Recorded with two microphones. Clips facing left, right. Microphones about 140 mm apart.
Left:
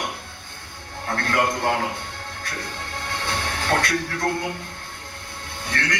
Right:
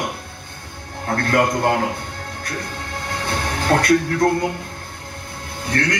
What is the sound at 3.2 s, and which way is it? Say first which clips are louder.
Music: right 6 dB; 40° right (ahead or behind).